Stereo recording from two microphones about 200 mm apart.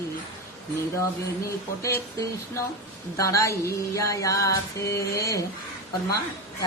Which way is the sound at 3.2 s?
15° left (ahead or behind).